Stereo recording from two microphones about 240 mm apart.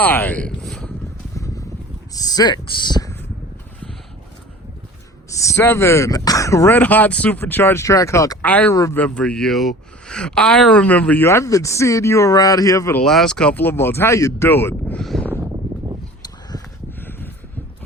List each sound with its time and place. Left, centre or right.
0.0 s speech: centre
2.1 s speech: centre
5.3 s speech: centre
17.0 s a sound: centre